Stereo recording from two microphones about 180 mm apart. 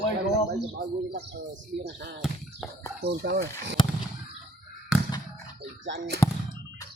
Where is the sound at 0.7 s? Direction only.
50° right (ahead or behind); by 3.4 s 65° right (ahead or behind).